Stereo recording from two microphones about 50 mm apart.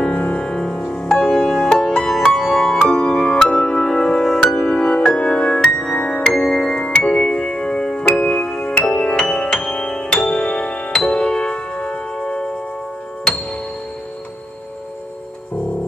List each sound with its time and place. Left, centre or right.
0.0 s music: left
2.2 s music: centre